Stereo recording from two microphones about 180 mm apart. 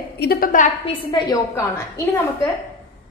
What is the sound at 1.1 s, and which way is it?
Speech, 20° left (ahead or behind).